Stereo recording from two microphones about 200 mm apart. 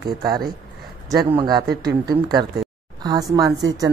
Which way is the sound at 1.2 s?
25° right (ahead or behind).